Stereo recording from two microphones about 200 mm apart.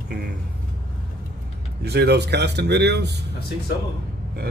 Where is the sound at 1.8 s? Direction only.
55° right (ahead or behind).